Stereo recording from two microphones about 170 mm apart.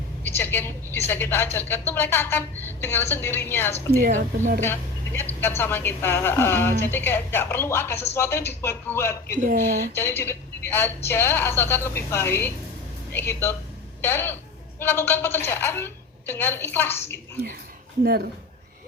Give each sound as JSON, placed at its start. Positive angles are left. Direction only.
{"t": 0.2, "sound": "a sound", "side_deg": 10}
{"t": 1.0, "sound": "a woman's voice", "side_deg": 10}
{"t": 3.9, "sound": "speech", "side_deg": -50}
{"t": 4.6, "sound": "a woman's voice", "side_deg": 15}
{"t": 18.0, "sound": "speech", "side_deg": -70}